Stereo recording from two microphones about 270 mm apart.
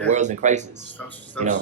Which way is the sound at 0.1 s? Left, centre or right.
Right.